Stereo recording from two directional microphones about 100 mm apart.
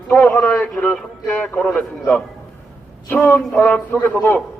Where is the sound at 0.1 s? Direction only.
15° left (ahead or behind).